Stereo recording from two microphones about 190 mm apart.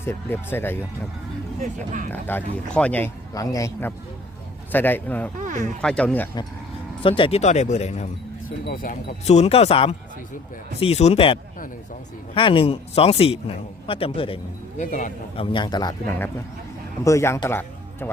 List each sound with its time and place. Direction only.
0.0 s a man's voice: 10° left (ahead or behind)
1.6 s speech: 45° right (ahead or behind)
2.2 s a man's voice: 10° left (ahead or behind)
5.4 s speech: 40° right (ahead or behind)
5.8 s speech: 5° left (ahead or behind)
7.0 s speech: 30° left (ahead or behind)
8.6 s a man's voice: 50° left (ahead or behind); by 14.4 s 30° left (ahead or behind)
14.8 s a man's voice: 45° left (ahead or behind)
15.4 s a man's voice: 25° left (ahead or behind)